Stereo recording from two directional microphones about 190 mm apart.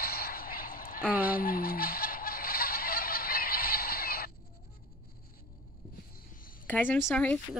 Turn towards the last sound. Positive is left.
turn(degrees=5)  # may be behind; listen again after turning